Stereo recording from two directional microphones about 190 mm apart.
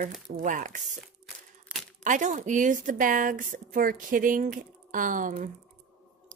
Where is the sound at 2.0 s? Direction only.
40° right (ahead or behind).